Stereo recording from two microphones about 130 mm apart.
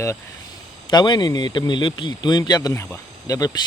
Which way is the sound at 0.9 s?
35° left (ahead or behind).